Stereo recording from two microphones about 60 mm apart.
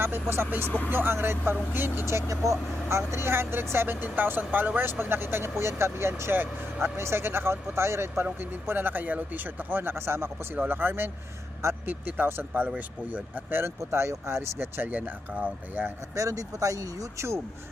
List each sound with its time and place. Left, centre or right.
0.0 s speech: right
2.0 s speech: right
3.1 s speech: right
6.9 s speech: right
12.0 s speech: right
13.6 s speech: right
16.1 s speech: right